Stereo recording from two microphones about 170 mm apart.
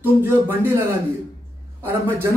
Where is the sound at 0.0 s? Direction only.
15° right (ahead or behind).